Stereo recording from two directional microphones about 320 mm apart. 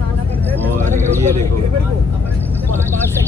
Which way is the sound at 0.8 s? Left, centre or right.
Right.